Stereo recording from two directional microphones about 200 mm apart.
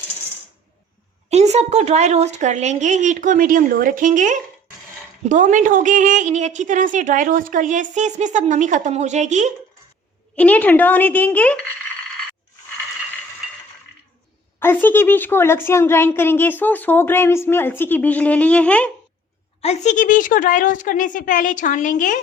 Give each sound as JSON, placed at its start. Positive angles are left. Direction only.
{"t": 1.3, "sound": "a woman's voice", "side_deg": -35}
{"t": 10.3, "sound": "a child's voice", "side_deg": 5}
{"t": 14.6, "sound": "a child's voice", "side_deg": 10}
{"t": 19.6, "sound": "a woman's voice", "side_deg": 35}